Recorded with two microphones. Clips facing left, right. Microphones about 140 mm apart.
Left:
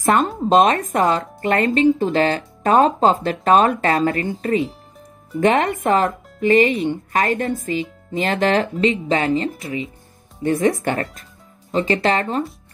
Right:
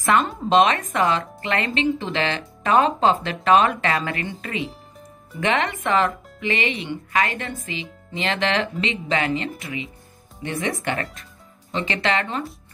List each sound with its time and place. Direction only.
0.0 s speech: 45° left (ahead or behind)